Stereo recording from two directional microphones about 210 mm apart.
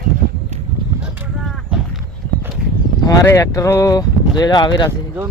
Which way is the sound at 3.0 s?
15° left (ahead or behind).